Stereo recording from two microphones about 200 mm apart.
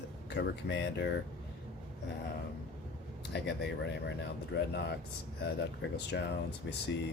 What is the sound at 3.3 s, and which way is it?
Speech, 60° left (ahead or behind).